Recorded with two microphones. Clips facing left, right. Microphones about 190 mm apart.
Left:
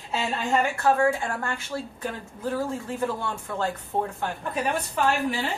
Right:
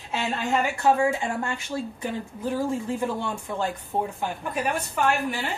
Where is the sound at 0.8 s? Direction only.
15° right (ahead or behind).